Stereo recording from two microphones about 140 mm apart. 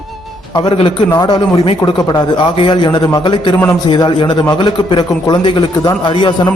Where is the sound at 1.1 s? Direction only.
35° left (ahead or behind).